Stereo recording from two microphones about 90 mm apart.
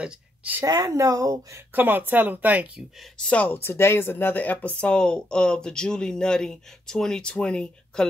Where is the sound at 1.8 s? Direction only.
20° right (ahead or behind).